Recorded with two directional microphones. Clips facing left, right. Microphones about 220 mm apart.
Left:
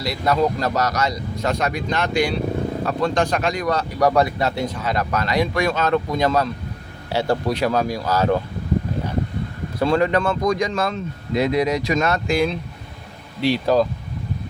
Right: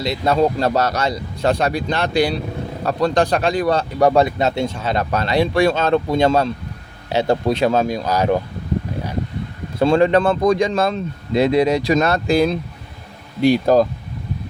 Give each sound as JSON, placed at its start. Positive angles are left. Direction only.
{"t": 0.0, "sound": "speech", "side_deg": -25}
{"t": 9.8, "sound": "speech", "side_deg": -30}
{"t": 13.4, "sound": "speech", "side_deg": -50}